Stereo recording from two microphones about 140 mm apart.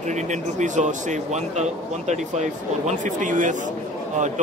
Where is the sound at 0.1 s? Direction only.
60° right (ahead or behind).